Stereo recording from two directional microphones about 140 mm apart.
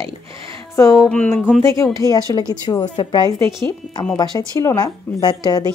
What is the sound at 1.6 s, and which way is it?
Speech, 20° left (ahead or behind).